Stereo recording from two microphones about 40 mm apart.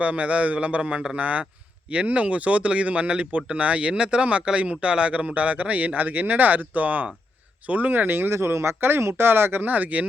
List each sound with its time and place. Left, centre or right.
0.0 s speech: right
9.6 s speech: right